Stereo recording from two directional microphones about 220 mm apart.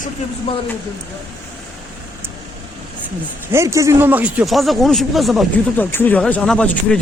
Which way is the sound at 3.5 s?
15° right (ahead or behind).